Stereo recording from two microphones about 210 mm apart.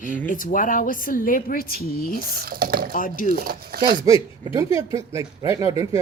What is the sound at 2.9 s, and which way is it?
Speech, 40° left (ahead or behind).